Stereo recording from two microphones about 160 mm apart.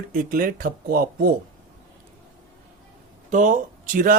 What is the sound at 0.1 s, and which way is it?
Speech, 60° right (ahead or behind).